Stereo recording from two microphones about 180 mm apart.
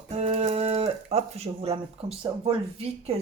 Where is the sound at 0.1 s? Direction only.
35° right (ahead or behind).